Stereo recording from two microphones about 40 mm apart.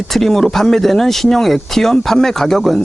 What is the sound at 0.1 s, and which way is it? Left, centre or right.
Speech, centre.